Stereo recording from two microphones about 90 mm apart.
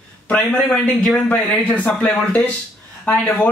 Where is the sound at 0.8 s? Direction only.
5° left (ahead or behind).